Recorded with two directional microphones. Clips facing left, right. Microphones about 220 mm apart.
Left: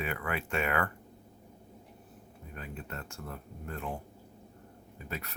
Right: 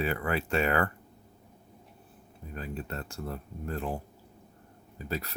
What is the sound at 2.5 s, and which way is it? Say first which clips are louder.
Speech: right 5 dB; 35° right (ahead or behind).